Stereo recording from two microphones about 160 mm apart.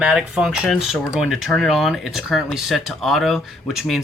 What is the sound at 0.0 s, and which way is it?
Speech, 5° right (ahead or behind).